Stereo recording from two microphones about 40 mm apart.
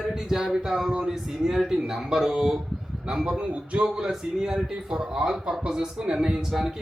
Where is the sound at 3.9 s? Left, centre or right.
Centre.